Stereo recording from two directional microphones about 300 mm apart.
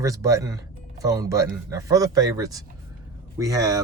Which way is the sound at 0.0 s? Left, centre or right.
Centre.